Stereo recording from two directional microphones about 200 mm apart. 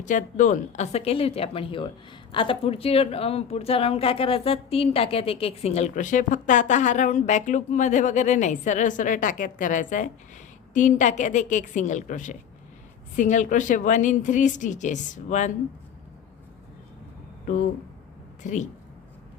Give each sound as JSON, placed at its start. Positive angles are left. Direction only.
{"t": 0.0, "sound": "a woman's voice", "side_deg": 40}
{"t": 18.4, "sound": "a woman's voice", "side_deg": 40}